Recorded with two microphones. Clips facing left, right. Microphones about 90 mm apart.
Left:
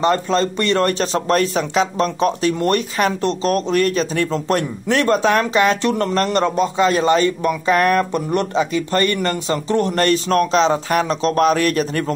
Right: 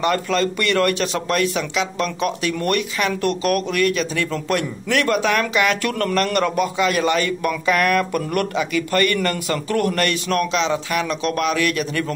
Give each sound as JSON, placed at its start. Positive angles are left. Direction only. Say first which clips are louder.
{"t": 0.0, "sound": "speech", "louder": "left 3 dB", "side_deg": 30}